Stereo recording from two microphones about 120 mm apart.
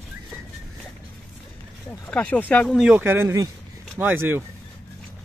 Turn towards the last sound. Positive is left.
turn(degrees=-20)  # may be behind; listen again after turning